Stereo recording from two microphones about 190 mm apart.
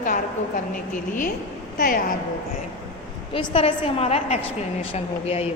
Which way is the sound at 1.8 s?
45° left (ahead or behind).